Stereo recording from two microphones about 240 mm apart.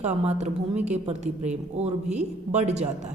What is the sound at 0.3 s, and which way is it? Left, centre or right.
A woman's voice, right.